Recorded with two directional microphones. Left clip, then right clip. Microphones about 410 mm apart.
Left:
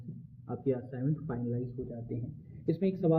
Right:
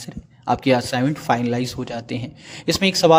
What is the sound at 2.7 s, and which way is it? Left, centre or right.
Speech, right.